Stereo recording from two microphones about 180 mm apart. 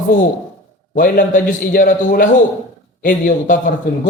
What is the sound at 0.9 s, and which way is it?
Speech, 50° left (ahead or behind).